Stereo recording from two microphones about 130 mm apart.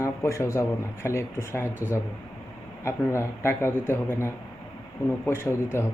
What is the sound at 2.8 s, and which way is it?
Speech, 20° left (ahead or behind).